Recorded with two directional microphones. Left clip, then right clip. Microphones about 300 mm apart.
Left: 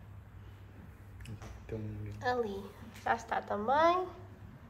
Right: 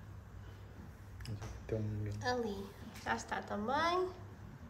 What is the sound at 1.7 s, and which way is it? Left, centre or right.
Speech, right.